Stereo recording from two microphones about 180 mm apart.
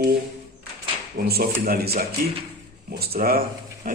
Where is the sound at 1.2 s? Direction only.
60° right (ahead or behind).